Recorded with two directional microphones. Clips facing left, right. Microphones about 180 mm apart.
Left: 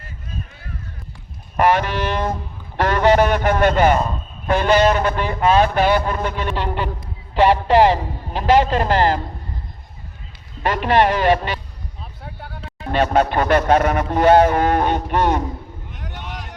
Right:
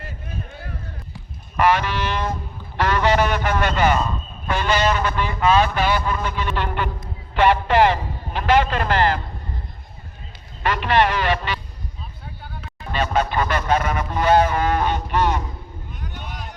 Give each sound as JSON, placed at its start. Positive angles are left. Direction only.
{"t": 0.3, "sound": "run", "side_deg": -60}
{"t": 1.5, "sound": "a man's voice", "side_deg": 50}
{"t": 6.5, "sound": "a man's voice", "side_deg": 35}
{"t": 10.6, "sound": "a man's voice", "side_deg": 45}
{"t": 12.2, "sound": "a sound", "side_deg": 70}
{"t": 13.1, "sound": "a man's voice", "side_deg": 65}
{"t": 15.9, "sound": "a sound", "side_deg": 90}